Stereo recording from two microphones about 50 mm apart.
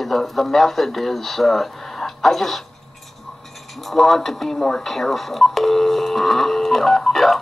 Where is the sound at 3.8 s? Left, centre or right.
Centre.